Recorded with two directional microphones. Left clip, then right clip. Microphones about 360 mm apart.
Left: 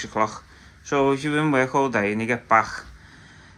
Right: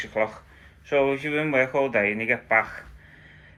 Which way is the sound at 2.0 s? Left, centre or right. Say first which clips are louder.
Even; left.